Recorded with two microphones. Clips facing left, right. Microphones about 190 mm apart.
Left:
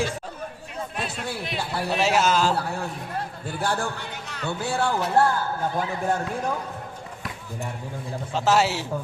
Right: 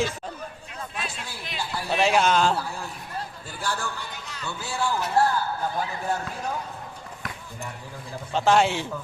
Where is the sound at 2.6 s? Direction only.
60° left (ahead or behind).